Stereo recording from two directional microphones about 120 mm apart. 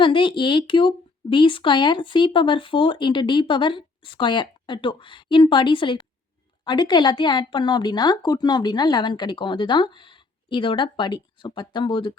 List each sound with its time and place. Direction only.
0.0 s a woman's voice: 45° left (ahead or behind)